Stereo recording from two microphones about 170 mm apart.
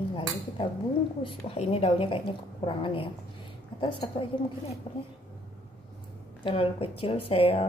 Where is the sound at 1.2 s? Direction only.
35° left (ahead or behind).